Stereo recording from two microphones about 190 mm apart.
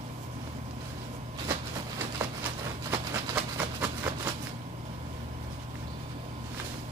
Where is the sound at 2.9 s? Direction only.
15° right (ahead or behind).